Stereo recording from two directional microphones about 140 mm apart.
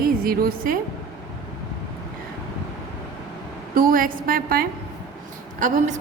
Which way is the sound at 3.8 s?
85° right.